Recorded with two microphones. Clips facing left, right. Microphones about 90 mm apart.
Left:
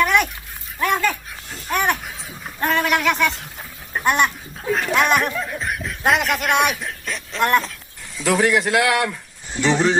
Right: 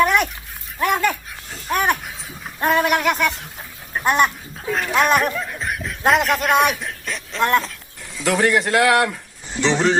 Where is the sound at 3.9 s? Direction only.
Centre (ahead or behind).